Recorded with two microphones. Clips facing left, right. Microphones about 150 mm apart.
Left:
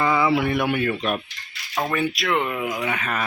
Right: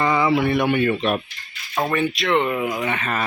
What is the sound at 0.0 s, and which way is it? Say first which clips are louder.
Speech: right 1 dB; 5° left (ahead or behind).